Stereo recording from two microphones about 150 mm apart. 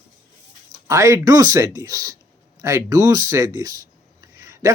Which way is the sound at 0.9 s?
20° right (ahead or behind).